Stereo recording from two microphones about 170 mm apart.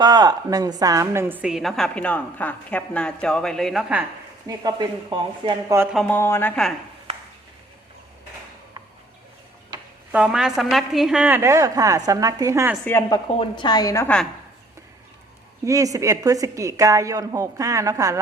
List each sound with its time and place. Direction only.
0.0 s a woman's voice: 25° right (ahead or behind); by 4.0 s 5° right (ahead or behind)
4.4 s a woman's voice: 20° right (ahead or behind)
5.9 s a woman's voice: centre (ahead or behind)
6.1 s a woman's voice: 15° left (ahead or behind)
10.1 s a woman's voice: 5° right (ahead or behind)
12.8 s a woman's voice: 10° left (ahead or behind)
13.1 s a woman's voice: 25° left (ahead or behind)
15.6 s a woman's voice: 20° right (ahead or behind)